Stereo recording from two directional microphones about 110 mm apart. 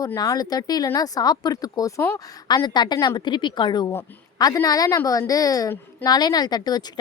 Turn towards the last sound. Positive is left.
turn(degrees=40)  # may be behind; listen again after turning